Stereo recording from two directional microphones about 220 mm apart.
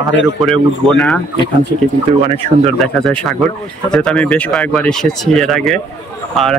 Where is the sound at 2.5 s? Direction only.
40° right (ahead or behind).